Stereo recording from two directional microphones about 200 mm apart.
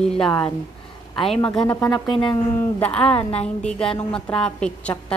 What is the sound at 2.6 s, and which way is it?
A woman's voice, 5° left (ahead or behind).